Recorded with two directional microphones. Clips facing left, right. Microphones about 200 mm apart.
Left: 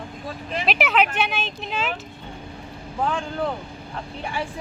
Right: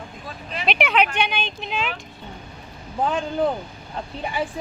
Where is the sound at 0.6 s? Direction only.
Centre (ahead or behind).